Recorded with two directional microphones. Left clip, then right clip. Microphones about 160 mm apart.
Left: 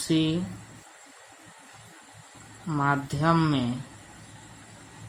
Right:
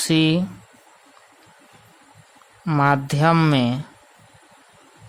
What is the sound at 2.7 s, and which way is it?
Speech, 80° right.